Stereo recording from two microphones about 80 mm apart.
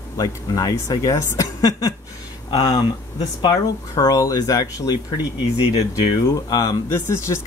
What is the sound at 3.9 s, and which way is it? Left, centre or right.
Speech, left.